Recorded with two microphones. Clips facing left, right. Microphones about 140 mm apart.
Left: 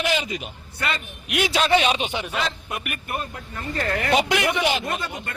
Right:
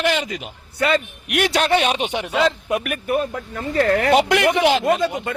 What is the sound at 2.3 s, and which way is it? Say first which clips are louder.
Speech: right 9 dB; 90° right.